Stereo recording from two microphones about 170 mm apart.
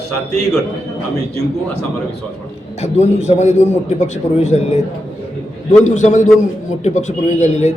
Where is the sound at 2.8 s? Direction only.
40° left (ahead or behind).